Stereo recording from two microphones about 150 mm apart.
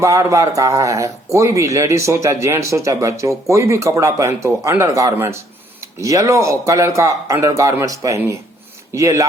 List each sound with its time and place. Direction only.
0.0 s speech: 20° right (ahead or behind)